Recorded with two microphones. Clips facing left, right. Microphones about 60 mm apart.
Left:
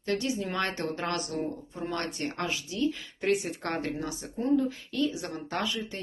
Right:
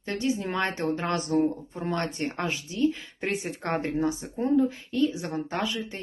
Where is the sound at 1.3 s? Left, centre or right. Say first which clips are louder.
Right 8 dB; right.